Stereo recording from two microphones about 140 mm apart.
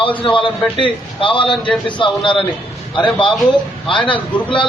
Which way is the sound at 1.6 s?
10° left (ahead or behind).